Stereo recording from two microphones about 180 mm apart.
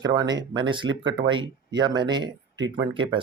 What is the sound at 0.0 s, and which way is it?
Speech, 20° right (ahead or behind).